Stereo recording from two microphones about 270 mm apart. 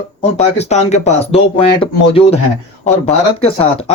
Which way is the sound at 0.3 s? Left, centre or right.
Left.